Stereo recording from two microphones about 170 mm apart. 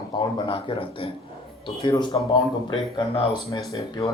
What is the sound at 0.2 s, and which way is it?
A man's voice, 25° left (ahead or behind).